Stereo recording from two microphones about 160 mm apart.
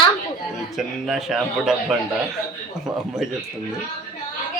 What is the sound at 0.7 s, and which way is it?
Speech, centre (ahead or behind).